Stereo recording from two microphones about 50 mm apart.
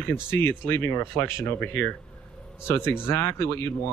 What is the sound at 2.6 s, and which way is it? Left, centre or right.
Speech, left.